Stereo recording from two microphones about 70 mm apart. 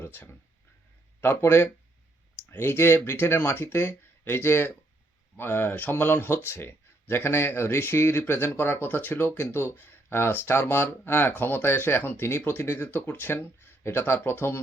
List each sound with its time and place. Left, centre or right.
0.0 s speech: left